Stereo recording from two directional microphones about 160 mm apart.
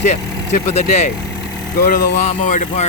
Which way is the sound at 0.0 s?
45° left (ahead or behind).